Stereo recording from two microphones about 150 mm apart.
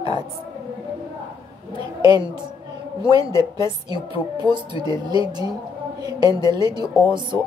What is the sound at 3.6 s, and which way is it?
A woman's voice, 30° right (ahead or behind).